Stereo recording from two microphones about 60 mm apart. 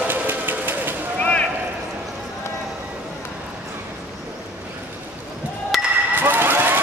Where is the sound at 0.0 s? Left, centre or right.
Right.